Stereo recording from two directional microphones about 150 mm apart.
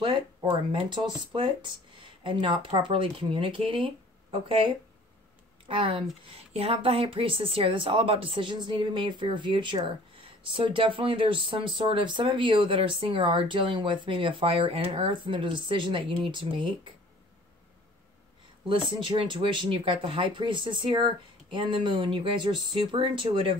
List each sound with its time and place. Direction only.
0.0 s speech: 30° right (ahead or behind)
18.7 s speech: 35° right (ahead or behind)